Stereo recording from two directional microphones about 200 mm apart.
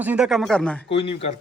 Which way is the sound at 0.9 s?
30° left (ahead or behind).